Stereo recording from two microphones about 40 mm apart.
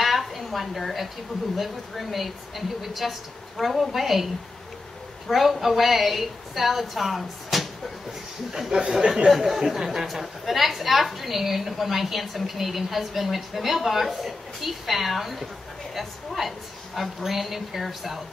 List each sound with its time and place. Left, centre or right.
0.0 s a sound: centre
1.6 s a woman's voice: centre
5.3 s a woman's voice: centre
9.0 s speech: right
9.3 s a woman's voice: centre